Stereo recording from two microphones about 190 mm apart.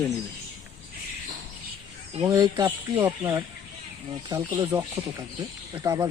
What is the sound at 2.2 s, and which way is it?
Speech, 20° right (ahead or behind).